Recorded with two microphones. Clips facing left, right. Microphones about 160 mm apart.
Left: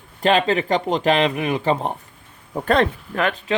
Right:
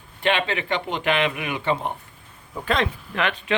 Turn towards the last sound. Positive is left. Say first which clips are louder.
# left 3 dB
turn(degrees=40)  # may be behind; listen again after turning